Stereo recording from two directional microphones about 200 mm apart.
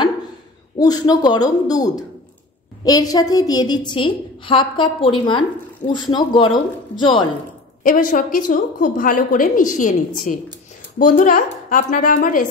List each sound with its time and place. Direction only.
0.7 s a woman's voice: 20° left (ahead or behind)
7.8 s a woman's voice: 40° left (ahead or behind)